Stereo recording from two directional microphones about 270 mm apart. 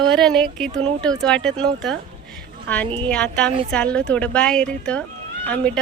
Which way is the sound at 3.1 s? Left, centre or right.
Centre.